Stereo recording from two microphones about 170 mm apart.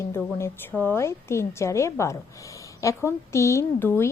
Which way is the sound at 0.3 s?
15° left (ahead or behind).